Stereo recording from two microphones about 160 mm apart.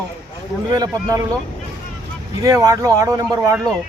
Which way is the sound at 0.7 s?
20° right (ahead or behind).